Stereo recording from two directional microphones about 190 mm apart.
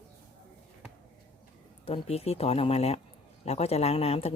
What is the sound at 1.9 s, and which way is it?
Speech, 30° left (ahead or behind).